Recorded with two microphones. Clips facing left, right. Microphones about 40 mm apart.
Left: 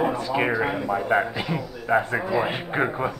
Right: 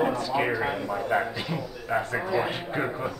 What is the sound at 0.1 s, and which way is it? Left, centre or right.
A man's voice, centre.